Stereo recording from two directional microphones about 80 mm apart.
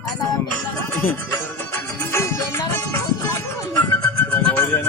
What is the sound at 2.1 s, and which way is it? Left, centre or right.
Music, left.